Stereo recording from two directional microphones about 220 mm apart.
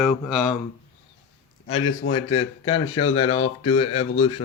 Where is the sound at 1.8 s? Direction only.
80° left.